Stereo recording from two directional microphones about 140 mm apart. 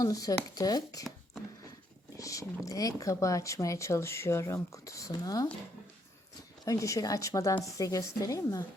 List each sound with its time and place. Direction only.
0.0 s speech: 25° left (ahead or behind)
2.1 s speech: 25° left (ahead or behind)
6.7 s speech: 25° left (ahead or behind)